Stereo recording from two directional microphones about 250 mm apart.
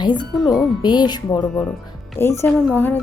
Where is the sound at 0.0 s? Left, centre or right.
Centre.